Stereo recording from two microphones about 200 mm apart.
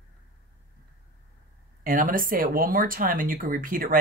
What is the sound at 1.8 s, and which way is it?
Speech, 45° right (ahead or behind).